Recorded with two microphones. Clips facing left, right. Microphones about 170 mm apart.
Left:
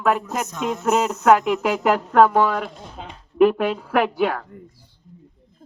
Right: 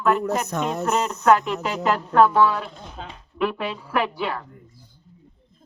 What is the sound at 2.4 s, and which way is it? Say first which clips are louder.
Speech: right 1 dB; 50° left (ahead or behind).